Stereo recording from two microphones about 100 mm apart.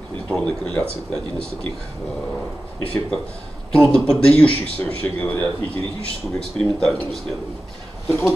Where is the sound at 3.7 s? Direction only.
5° left (ahead or behind).